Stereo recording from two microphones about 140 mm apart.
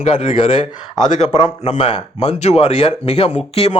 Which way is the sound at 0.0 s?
55° left (ahead or behind).